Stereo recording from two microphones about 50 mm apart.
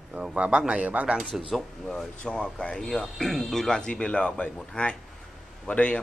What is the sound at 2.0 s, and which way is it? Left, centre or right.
Speech, centre.